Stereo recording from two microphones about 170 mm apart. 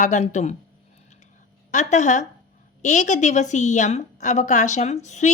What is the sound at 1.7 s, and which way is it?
A woman's voice, 45° left (ahead or behind).